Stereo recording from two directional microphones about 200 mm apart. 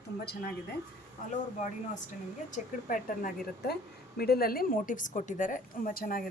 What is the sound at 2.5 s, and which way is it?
A woman's voice, 40° left (ahead or behind).